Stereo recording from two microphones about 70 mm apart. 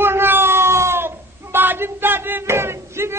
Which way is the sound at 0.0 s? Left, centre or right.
Right.